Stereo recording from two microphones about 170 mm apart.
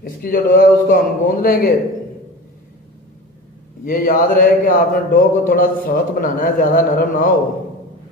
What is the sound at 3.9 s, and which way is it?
Speech, 55° left (ahead or behind).